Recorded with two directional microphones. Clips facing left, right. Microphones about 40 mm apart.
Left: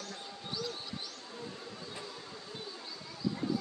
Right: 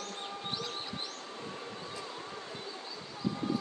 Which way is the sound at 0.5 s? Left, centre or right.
Right.